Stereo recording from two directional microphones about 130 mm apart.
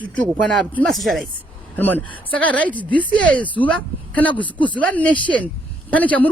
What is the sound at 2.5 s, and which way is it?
Speech, 10° left (ahead or behind).